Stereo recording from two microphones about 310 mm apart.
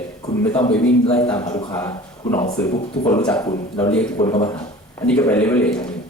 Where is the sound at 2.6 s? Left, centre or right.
Centre.